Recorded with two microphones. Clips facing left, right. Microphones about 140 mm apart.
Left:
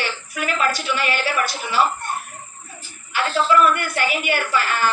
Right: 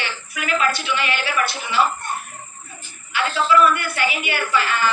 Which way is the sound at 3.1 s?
45° left (ahead or behind).